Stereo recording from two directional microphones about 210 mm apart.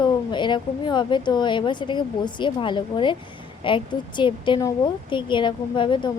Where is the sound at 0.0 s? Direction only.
20° left (ahead or behind).